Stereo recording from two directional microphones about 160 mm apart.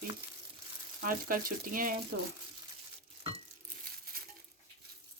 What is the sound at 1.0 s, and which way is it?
Speech, 60° right (ahead or behind).